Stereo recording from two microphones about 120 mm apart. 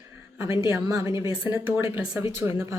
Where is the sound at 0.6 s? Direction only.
25° right (ahead or behind).